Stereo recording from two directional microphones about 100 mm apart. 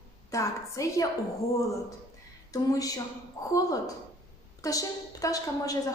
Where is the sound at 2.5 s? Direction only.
35° left (ahead or behind).